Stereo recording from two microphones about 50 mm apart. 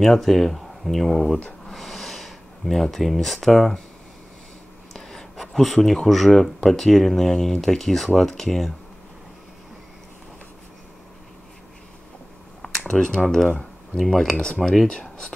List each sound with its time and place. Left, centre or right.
0.0 s speech: centre
1.7 s a sound: centre
4.9 s speech: centre
12.8 s speech: centre
14.3 s speech: centre
14.6 s speech: centre
14.9 s speech: centre